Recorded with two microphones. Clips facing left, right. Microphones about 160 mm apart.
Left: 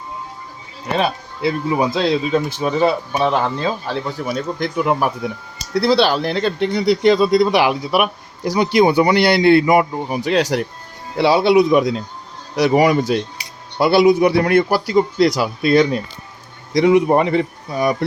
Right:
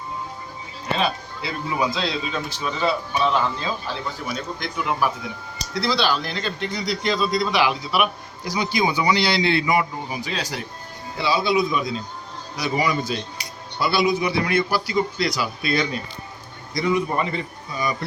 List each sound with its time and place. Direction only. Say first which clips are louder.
0.9 s speech: left 6 dB; 55° left (ahead or behind)
10.2 s a man's voice: left 15 dB; 70° left (ahead or behind)
15.6 s speech: left 11 dB; 50° left (ahead or behind)
16.7 s a man's voice: left 9 dB; 75° left (ahead or behind)